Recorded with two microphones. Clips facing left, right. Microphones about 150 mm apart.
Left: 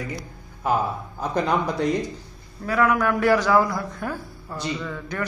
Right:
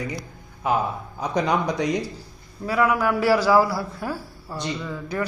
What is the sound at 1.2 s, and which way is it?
Speech, 5° left (ahead or behind).